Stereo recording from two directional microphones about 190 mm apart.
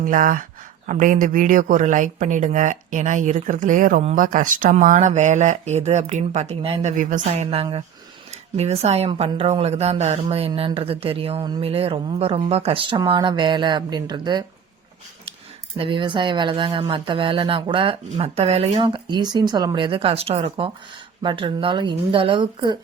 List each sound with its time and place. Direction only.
0.0 s speech: 45° right (ahead or behind); by 6.9 s 30° right (ahead or behind)
6.9 s a woman's voice: 40° right (ahead or behind); by 14.4 s 25° right (ahead or behind)
15.8 s a woman's voice: 25° right (ahead or behind)